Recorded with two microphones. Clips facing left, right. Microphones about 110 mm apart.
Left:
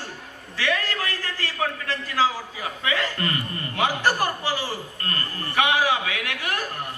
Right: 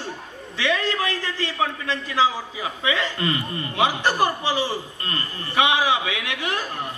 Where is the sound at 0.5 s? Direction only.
20° right (ahead or behind).